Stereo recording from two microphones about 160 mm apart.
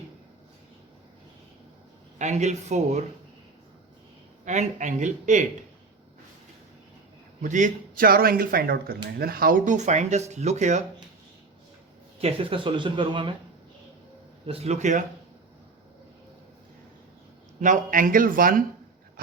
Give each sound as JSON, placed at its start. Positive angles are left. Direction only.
{"t": 2.1, "sound": "speech", "side_deg": -45}
{"t": 4.4, "sound": "speech", "side_deg": -45}
{"t": 7.4, "sound": "speech", "side_deg": -55}
{"t": 12.2, "sound": "speech", "side_deg": -35}
{"t": 14.4, "sound": "speech", "side_deg": -40}
{"t": 17.6, "sound": "speech", "side_deg": -55}